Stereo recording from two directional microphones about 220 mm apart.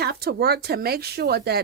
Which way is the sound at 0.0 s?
45° right (ahead or behind).